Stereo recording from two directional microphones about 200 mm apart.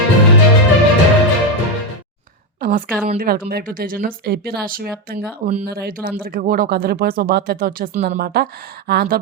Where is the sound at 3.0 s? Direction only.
45° right (ahead or behind).